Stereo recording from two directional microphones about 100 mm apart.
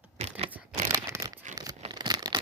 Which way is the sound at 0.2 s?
90° right.